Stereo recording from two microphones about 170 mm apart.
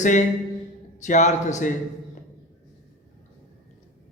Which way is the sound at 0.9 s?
45° left (ahead or behind).